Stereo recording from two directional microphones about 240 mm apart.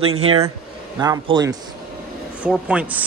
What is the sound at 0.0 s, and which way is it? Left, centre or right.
Speech, right.